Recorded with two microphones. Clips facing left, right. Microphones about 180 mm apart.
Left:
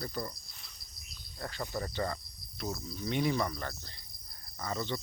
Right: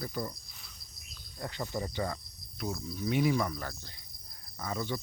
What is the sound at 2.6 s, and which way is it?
Speech, centre (ahead or behind).